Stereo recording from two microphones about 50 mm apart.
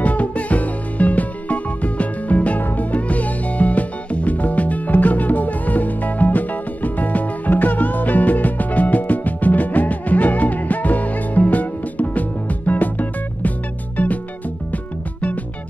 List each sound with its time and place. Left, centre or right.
0.0 s music: left